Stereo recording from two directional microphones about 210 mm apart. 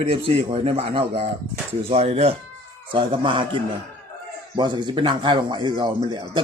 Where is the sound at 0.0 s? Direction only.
30° right (ahead or behind).